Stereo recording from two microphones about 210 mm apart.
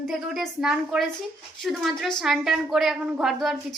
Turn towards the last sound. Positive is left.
turn(degrees=0)  # may be behind; listen again after turning